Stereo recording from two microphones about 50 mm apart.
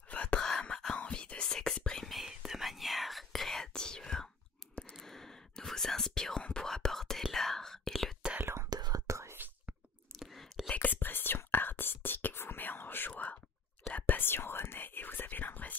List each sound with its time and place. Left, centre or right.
0.1 s whispering: left
0.4 s whispering: centre
2.0 s whispering: centre
8.5 s whispering: right
10.1 s whispering: centre
10.7 s whispering: left
13.1 s whispering: left